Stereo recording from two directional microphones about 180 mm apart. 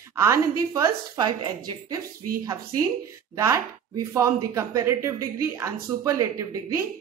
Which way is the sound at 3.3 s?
15° right (ahead or behind).